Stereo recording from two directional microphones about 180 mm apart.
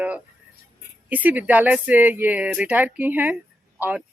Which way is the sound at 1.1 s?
10° right (ahead or behind).